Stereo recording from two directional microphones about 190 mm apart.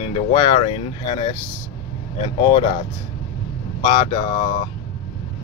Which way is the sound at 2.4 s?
30° left (ahead or behind).